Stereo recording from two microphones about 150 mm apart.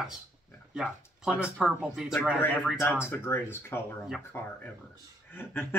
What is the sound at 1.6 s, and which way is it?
Speech, centre (ahead or behind).